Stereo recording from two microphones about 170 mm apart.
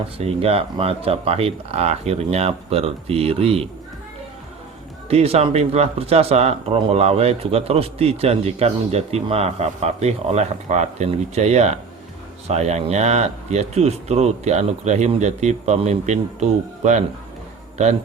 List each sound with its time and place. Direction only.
0.2 s speech: 35° right (ahead or behind)
5.0 s speech: 35° right (ahead or behind)